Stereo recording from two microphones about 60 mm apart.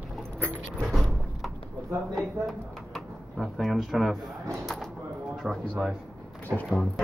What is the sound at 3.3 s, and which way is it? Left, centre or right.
Speech, centre.